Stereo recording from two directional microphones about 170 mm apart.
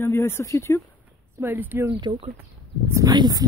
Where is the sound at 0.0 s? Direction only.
15° left (ahead or behind).